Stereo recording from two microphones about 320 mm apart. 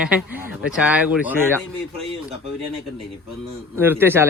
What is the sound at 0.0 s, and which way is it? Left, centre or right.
Speech, centre.